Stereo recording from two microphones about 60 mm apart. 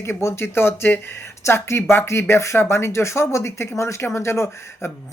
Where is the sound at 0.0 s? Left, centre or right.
Left.